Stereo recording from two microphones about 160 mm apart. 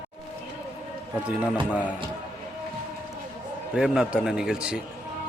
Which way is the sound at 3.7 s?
5° right (ahead or behind).